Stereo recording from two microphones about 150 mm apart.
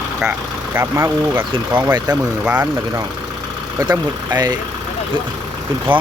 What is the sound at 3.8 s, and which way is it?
Speech, 25° right (ahead or behind).